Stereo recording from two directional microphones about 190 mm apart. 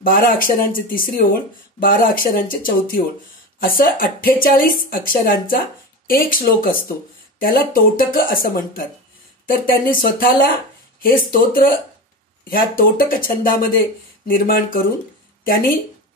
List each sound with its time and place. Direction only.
0.0 s speech: 50° left (ahead or behind)